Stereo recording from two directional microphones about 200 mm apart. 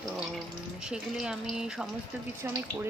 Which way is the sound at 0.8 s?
5° right (ahead or behind).